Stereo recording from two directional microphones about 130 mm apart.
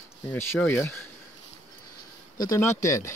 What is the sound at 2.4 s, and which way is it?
Speech, 25° left (ahead or behind).